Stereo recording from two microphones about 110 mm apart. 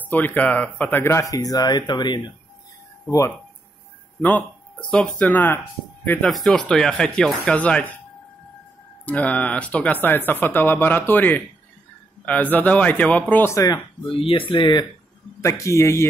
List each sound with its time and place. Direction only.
0.0 s speech: 15° left (ahead or behind); by 2.3 s 40° left (ahead or behind)
3.1 s speech: 25° left (ahead or behind)
4.2 s speech: 15° left (ahead or behind)
9.0 s speech: 15° left (ahead or behind)
14.1 s speech: 55° left (ahead or behind)
15.4 s speech: 30° left (ahead or behind)